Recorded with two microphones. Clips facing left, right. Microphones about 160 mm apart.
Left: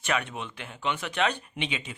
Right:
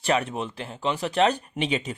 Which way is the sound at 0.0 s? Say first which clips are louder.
Right 6 dB; 35° right (ahead or behind).